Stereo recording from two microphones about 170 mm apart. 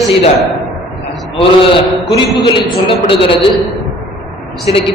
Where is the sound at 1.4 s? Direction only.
30° left (ahead or behind).